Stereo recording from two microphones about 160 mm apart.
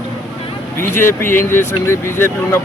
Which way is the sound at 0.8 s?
15° left (ahead or behind).